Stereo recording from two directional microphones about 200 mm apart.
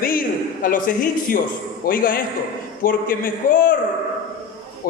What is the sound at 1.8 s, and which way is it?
A man's voice, 45° left (ahead or behind).